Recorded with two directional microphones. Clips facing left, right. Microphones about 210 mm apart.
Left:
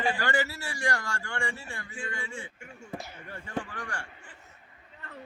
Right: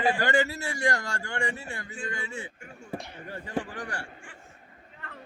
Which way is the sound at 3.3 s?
40° right (ahead or behind).